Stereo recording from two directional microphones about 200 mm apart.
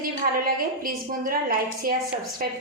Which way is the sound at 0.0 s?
45° right (ahead or behind).